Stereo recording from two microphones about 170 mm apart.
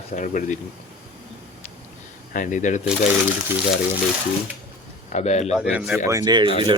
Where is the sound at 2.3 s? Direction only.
50° left (ahead or behind).